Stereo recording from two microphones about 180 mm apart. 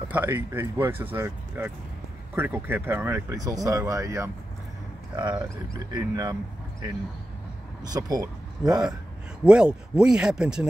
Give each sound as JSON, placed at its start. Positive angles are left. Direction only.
{"t": 0.1, "sound": "speech", "side_deg": -10}
{"t": 7.9, "sound": "speech", "side_deg": -20}
{"t": 9.4, "sound": "speech", "side_deg": -5}